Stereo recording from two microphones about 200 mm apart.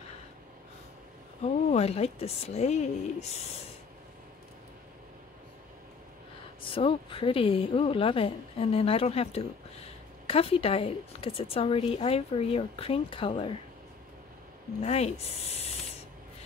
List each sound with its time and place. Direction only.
1.4 s speech: 35° left (ahead or behind)
6.6 s a woman's voice: 25° left (ahead or behind)
14.8 s speech: 30° left (ahead or behind)